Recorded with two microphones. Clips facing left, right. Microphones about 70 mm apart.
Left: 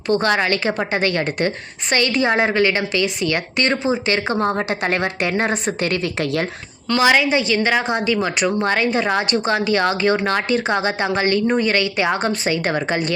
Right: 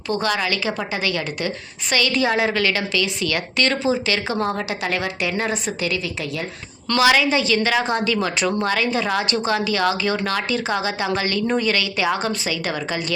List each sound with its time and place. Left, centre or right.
0.2 s a woman's voice: left
7.0 s a woman's voice: left
8.6 s a woman's voice: left